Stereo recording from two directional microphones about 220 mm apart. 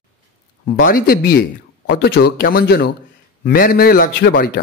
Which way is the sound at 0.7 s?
40° left (ahead or behind).